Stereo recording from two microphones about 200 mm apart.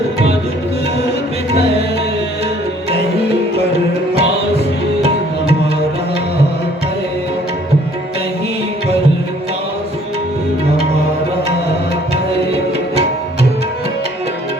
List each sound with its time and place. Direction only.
4.1 s music: 30° right (ahead or behind)